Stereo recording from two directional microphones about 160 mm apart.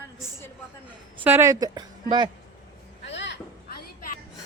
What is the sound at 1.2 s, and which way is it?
A woman's voice, 15° right (ahead or behind).